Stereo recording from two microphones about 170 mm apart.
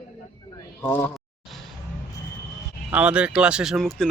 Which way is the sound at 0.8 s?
10° left (ahead or behind).